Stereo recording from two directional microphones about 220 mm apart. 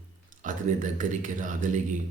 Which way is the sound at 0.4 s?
35° right (ahead or behind).